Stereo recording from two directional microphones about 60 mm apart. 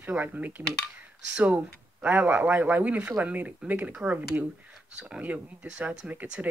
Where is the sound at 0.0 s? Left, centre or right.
Right.